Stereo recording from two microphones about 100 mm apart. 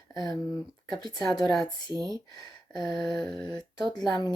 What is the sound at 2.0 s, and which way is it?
Speech, 40° right (ahead or behind).